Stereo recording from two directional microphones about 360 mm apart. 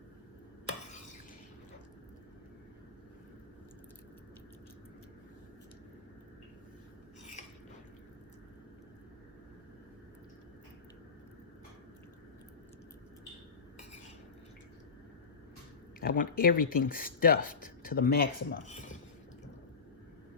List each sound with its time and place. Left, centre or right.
16.0 s speech: left